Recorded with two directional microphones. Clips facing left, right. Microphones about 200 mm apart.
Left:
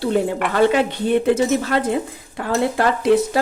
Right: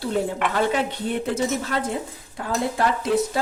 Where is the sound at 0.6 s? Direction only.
75° left (ahead or behind).